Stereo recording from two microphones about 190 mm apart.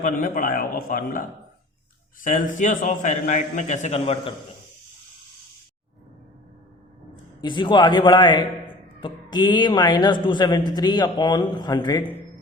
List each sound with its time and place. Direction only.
0.0 s a man's voice: 45° left (ahead or behind)
2.2 s a man's voice: 45° left (ahead or behind)
7.4 s a man's voice: 25° left (ahead or behind)